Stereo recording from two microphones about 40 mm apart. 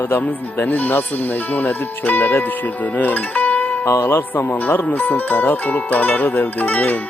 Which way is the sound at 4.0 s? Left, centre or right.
Left.